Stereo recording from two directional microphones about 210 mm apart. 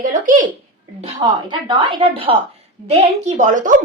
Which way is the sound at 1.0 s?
20° right (ahead or behind).